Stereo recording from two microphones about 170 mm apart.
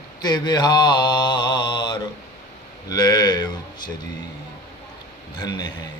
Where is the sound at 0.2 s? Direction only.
25° left (ahead or behind).